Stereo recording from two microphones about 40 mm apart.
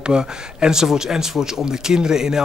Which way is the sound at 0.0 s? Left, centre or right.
Centre.